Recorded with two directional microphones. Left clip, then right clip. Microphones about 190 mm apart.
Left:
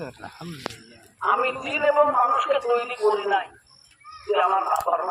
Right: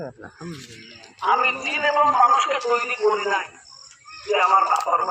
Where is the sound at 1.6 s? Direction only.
35° left (ahead or behind).